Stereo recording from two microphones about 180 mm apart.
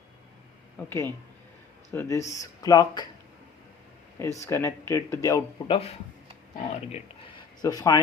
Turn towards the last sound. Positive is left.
turn(degrees=20)  # may be behind; listen again after turning